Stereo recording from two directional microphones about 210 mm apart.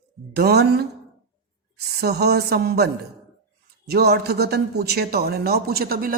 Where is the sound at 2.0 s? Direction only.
50° right (ahead or behind).